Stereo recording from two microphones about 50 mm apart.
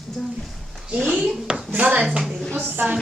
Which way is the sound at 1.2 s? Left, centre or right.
Centre.